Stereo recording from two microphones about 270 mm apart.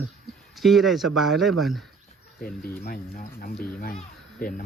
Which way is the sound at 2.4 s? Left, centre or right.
Left.